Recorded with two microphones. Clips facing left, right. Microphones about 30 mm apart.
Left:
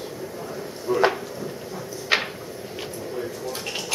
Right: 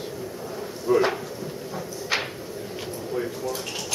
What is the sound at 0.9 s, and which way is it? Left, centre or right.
Speech, centre.